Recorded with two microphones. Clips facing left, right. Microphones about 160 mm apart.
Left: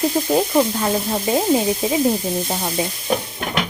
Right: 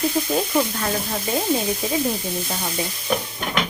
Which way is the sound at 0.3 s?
30° left (ahead or behind).